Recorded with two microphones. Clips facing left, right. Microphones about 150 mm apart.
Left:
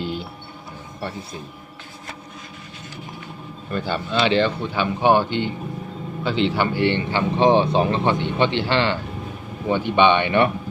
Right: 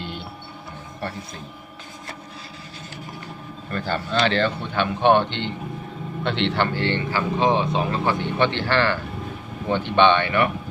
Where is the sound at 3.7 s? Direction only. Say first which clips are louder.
Left 1 dB; 10° left (ahead or behind).